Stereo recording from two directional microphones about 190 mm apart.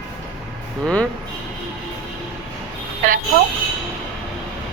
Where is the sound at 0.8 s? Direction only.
5° left (ahead or behind).